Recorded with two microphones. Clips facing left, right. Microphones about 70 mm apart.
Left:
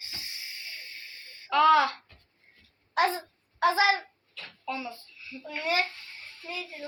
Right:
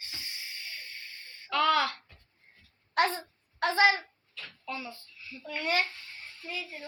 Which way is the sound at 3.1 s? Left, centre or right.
Centre.